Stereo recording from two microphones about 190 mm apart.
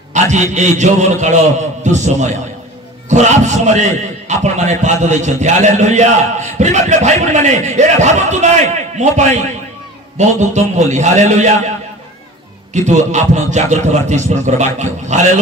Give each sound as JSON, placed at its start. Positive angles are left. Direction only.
{"t": 0.1, "sound": "a man's voice", "side_deg": -40}
{"t": 12.7, "sound": "a man's voice", "side_deg": -40}